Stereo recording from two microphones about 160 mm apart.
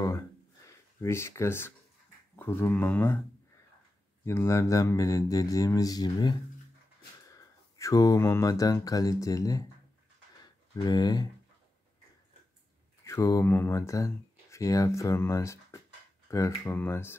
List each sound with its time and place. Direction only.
0.7 s speech: 15° left (ahead or behind)
4.2 s mantra: 15° left (ahead or behind)
7.3 s speech: 20° left (ahead or behind)
10.9 s mantra: 25° left (ahead or behind)
13.0 s speech: 20° left (ahead or behind)